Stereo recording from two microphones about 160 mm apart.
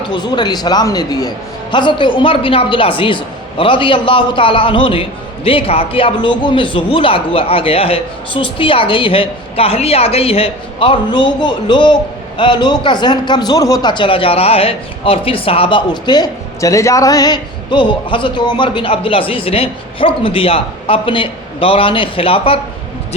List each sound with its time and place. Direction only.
0.0 s speech: 30° left (ahead or behind)